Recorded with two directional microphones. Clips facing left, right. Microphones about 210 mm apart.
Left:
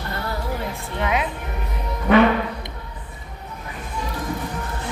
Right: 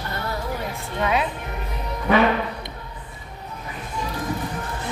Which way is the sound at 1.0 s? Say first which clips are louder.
Right 1 dB; 20° left (ahead or behind).